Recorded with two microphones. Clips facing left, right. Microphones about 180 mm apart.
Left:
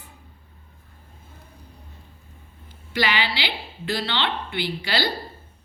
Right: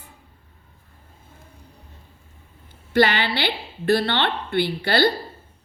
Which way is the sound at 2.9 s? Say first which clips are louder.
Right 6 dB; 55° right (ahead or behind).